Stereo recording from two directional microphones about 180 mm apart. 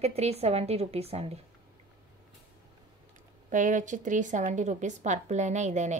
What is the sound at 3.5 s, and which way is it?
Speech, 45° right (ahead or behind).